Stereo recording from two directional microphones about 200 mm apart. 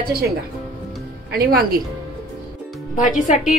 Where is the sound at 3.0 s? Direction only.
40° left (ahead or behind).